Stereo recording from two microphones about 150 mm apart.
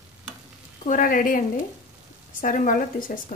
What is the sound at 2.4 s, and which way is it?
Speech, 60° left (ahead or behind).